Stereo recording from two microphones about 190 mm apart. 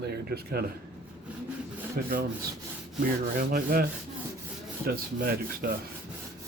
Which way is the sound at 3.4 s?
50° right (ahead or behind).